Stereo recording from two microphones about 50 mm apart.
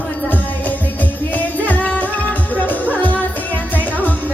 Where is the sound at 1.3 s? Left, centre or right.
Left.